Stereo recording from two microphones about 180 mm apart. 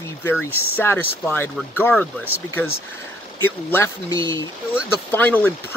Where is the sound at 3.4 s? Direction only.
15° left (ahead or behind).